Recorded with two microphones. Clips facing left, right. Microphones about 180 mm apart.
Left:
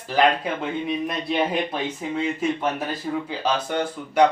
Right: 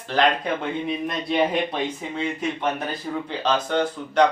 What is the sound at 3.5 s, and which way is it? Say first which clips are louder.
Speech: right 2 dB; 10° left (ahead or behind).